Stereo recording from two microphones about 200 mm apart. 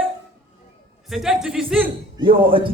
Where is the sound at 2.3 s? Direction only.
25° right (ahead or behind).